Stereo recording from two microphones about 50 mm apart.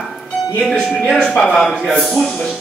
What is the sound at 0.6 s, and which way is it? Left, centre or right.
Speech, left.